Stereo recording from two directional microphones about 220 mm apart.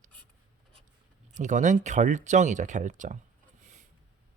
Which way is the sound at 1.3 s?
35° right (ahead or behind).